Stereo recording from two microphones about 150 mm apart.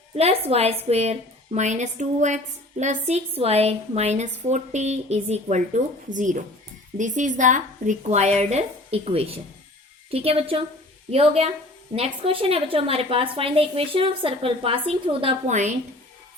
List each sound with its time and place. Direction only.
0.1 s a woman's voice: 45° right (ahead or behind)
15.4 s a woman's voice: 50° right (ahead or behind)